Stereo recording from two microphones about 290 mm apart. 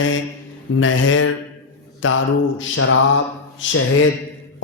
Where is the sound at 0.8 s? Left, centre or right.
Left.